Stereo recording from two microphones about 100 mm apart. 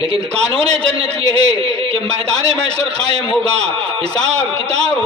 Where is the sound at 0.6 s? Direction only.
10° left (ahead or behind).